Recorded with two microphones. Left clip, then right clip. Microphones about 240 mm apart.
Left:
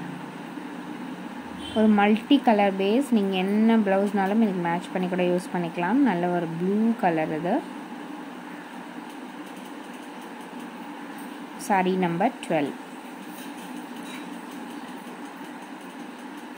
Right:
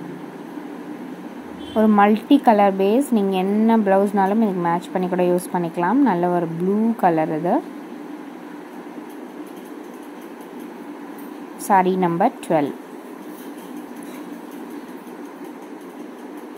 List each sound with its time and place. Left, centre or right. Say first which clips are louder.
1.8 s a woman's voice: right 6 dB; centre
11.6 s a woman's voice: right 7 dB; centre